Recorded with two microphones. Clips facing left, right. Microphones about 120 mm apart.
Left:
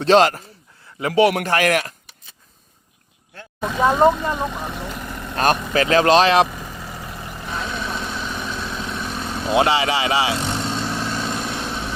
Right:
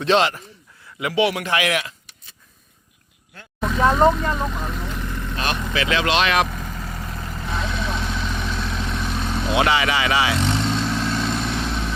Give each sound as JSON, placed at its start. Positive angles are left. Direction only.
{"t": 0.0, "sound": "a man's voice", "side_deg": 40}
{"t": 3.6, "sound": "speech", "side_deg": 10}
{"t": 5.4, "sound": "speech", "side_deg": 45}
{"t": 6.5, "sound": "vehicle", "side_deg": 10}
{"t": 9.5, "sound": "speech", "side_deg": 30}
{"t": 10.3, "sound": "vehicle", "side_deg": 10}